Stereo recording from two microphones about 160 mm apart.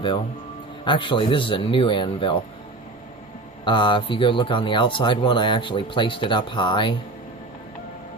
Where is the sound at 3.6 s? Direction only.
30° left (ahead or behind).